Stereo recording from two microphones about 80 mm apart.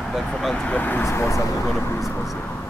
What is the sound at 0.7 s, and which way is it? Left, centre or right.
Speech, centre.